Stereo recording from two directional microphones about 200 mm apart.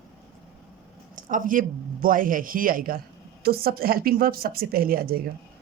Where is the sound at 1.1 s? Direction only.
40° right (ahead or behind).